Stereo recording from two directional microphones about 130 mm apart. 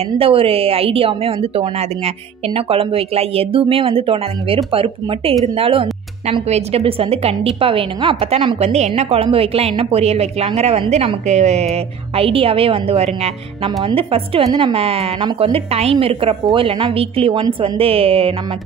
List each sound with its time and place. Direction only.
0.2 s speech: 45° right (ahead or behind)